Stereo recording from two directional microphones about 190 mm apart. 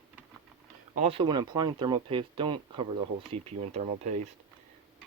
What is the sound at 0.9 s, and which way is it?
Speech, 30° right (ahead or behind).